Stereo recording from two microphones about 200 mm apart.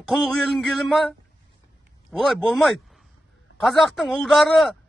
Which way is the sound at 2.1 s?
Centre (ahead or behind).